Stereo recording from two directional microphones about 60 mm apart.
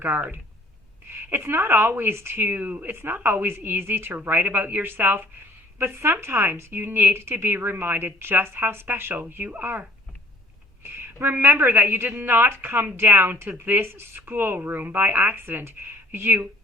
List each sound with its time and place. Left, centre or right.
0.0 s a woman's voice: right
10.9 s a woman's voice: right